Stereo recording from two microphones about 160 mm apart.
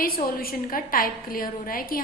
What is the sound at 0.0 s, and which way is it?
A woman's voice, 65° left (ahead or behind).